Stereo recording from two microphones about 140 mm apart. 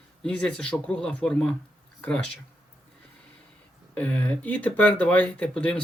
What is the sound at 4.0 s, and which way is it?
Speech, 10° left (ahead or behind).